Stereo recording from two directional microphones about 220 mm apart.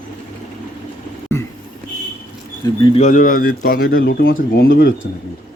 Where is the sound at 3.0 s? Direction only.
35° left (ahead or behind).